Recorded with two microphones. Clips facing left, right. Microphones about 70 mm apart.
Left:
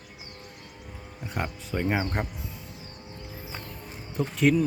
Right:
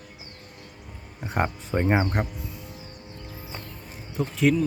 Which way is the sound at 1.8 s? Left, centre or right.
Right.